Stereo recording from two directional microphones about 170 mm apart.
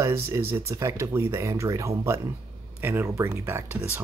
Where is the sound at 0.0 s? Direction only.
15° right (ahead or behind).